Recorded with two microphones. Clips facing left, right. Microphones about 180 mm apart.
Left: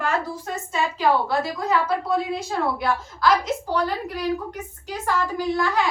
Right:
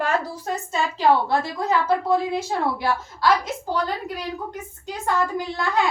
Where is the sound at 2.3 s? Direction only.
25° right (ahead or behind).